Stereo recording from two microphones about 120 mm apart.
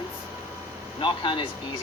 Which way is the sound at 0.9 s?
45° left (ahead or behind).